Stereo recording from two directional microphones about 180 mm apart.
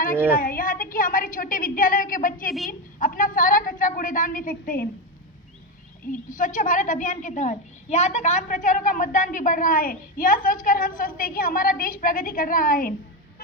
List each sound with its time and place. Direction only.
0.3 s a woman's voice: 50° left (ahead or behind)
6.1 s a woman's voice: 45° left (ahead or behind)